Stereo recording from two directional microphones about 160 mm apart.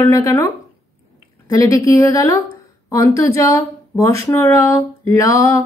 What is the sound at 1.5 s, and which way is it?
Speech, 20° left (ahead or behind).